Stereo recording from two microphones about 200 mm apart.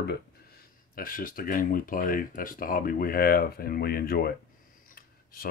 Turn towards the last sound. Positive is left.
turn(degrees=50)  # may be behind; listen again after turning